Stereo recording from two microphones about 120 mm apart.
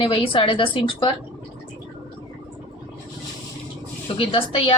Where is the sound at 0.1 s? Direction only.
45° left (ahead or behind).